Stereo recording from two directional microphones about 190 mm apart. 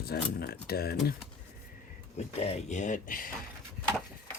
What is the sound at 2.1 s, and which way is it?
Speech, 35° left (ahead or behind).